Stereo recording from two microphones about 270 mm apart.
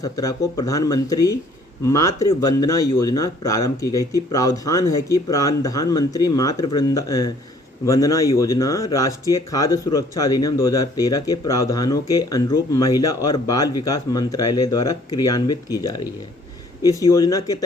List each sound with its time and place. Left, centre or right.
0.0 s speech: centre
13.7 s speech: left
14.1 s speech: centre